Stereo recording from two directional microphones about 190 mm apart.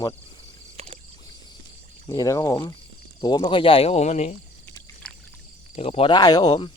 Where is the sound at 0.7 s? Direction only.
30° right (ahead or behind).